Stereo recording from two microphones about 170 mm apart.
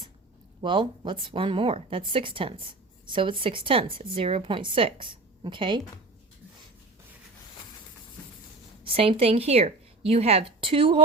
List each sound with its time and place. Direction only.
0.6 s a woman's voice: 30° right (ahead or behind)
8.8 s a woman's voice: 35° right (ahead or behind)